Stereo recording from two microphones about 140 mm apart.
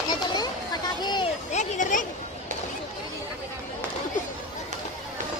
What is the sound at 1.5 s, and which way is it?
Speech, 65° left (ahead or behind).